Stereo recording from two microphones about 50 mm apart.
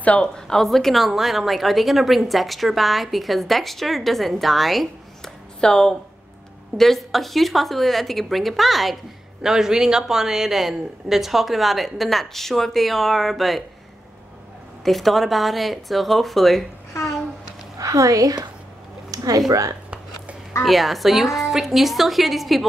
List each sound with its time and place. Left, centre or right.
0.2 s a woman's voice: centre
5.6 s speech: centre
6.8 s a woman's voice: centre
9.4 s a woman's voice: centre
14.9 s a woman's voice: centre
17.8 s a woman's voice: right
20.6 s a woman's voice: centre